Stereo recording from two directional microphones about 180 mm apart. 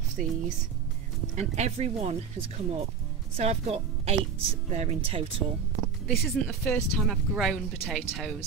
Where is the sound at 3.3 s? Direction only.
35° right (ahead or behind).